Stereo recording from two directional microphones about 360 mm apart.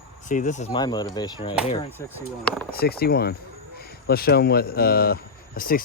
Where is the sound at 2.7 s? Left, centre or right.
Left.